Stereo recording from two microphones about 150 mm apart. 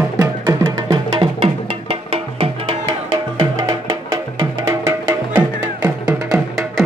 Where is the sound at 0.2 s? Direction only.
25° right (ahead or behind).